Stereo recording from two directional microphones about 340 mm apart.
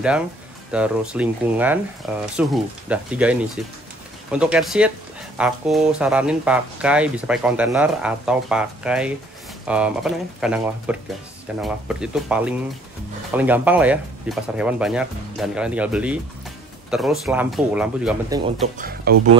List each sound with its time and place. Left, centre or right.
0.7 s speech: centre
18.8 s speech: right